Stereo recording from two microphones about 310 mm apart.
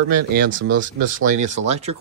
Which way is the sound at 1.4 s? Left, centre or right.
Right.